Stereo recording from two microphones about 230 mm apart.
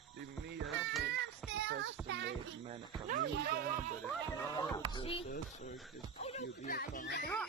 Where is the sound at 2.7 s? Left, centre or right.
Right.